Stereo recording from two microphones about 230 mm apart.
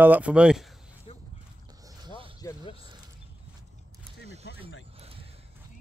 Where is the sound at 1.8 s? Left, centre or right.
Right.